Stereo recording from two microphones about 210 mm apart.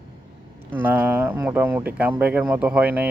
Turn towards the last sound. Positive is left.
turn(degrees=-5)  # may be behind; listen again after turning